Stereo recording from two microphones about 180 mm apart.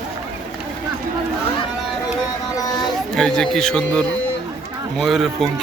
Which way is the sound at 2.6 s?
20° left (ahead or behind).